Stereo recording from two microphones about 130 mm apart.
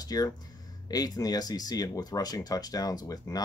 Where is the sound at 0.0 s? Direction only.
30° left (ahead or behind).